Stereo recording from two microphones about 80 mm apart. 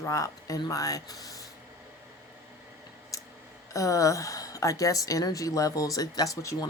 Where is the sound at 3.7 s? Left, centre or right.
Left.